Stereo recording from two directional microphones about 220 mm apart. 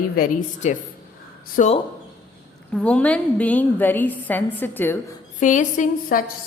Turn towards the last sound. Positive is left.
turn(degrees=40)  # may be behind; listen again after turning